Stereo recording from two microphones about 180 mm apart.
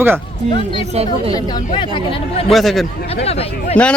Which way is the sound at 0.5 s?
30° left (ahead or behind).